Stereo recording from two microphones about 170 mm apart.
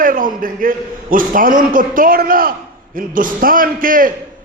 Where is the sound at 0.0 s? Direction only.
55° right (ahead or behind).